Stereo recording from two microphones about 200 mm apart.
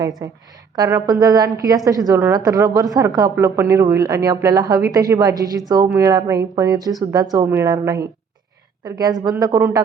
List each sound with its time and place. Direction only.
0.2 s a woman's voice: 15° right (ahead or behind)